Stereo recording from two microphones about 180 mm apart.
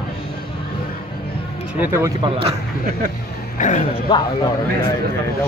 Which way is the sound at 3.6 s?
45° left (ahead or behind).